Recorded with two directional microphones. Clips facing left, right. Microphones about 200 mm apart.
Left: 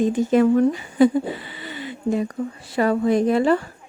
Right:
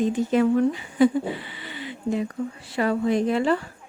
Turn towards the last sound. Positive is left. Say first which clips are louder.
# left 4 dB
turn(degrees=45)  # may be behind; listen again after turning